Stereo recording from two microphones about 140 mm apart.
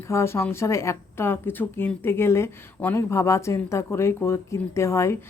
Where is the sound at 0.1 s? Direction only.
20° left (ahead or behind).